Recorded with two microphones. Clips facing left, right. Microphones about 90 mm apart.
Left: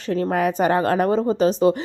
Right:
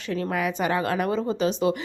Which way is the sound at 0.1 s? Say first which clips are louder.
Left 6 dB; 40° left (ahead or behind).